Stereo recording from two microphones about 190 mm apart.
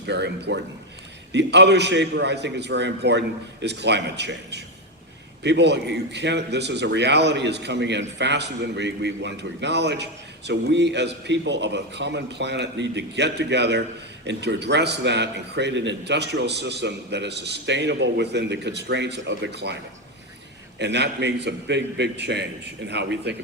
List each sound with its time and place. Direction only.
0.1 s a man's voice: 65° right (ahead or behind)
20.7 s a man's voice: 65° right (ahead or behind)